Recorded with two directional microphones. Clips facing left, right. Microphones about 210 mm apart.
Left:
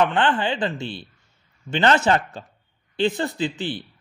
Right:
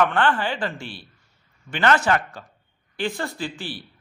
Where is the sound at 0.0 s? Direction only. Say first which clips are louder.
Left 1 dB; 20° left (ahead or behind).